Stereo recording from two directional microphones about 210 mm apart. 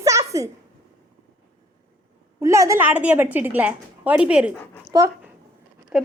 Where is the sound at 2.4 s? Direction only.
15° right (ahead or behind).